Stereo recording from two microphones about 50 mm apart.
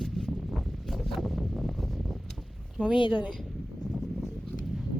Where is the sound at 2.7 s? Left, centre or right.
Centre.